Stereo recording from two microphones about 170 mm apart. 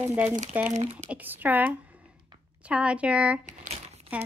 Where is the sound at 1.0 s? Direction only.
10° right (ahead or behind).